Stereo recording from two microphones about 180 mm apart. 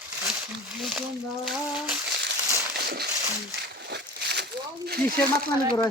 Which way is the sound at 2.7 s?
60° right (ahead or behind).